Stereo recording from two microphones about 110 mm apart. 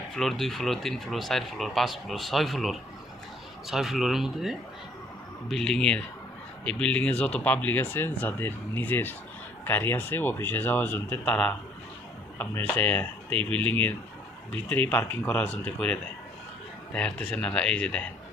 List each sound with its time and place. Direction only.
0.1 s speech: 5° left (ahead or behind)
12.4 s speech: 15° left (ahead or behind)